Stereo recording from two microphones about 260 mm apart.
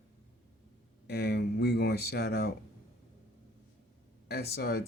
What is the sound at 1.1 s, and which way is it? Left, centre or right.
Speech, left.